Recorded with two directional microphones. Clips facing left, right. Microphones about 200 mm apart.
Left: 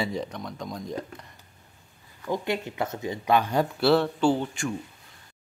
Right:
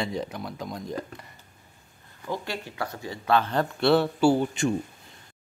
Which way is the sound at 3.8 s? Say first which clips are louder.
Right 2 dB; centre (ahead or behind).